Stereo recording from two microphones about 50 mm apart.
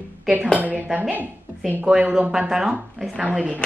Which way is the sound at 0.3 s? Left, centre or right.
Right.